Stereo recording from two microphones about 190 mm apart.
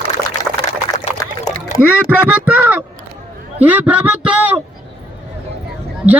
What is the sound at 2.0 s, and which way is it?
Speech, 5° right (ahead or behind).